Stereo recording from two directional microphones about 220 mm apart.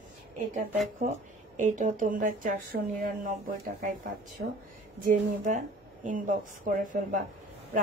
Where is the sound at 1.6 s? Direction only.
35° right (ahead or behind).